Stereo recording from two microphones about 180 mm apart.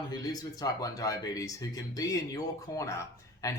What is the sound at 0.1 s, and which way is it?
Speech, 20° left (ahead or behind).